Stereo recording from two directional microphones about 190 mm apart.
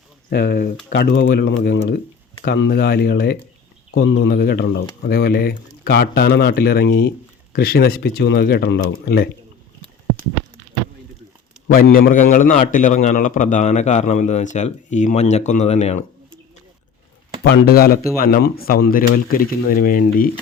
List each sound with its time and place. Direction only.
0.3 s speech: 60° left (ahead or behind)
11.7 s a man's voice: 50° left (ahead or behind); by 16.0 s 35° left (ahead or behind)
17.4 s speech: 55° left (ahead or behind)